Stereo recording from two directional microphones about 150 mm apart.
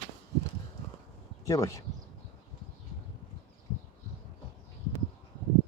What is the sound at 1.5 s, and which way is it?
Speech, 20° left (ahead or behind).